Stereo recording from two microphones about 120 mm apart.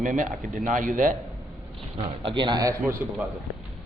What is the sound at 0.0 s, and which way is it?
A man's voice, 90° right.